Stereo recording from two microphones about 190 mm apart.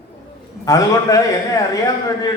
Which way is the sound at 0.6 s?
15° left (ahead or behind).